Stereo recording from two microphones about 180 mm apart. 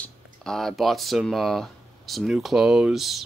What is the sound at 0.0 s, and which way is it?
Speech, 5° left (ahead or behind).